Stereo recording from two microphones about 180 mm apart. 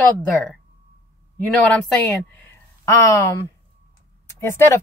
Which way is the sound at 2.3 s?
10° left (ahead or behind).